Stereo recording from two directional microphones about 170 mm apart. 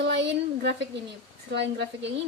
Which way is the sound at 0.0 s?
90° right.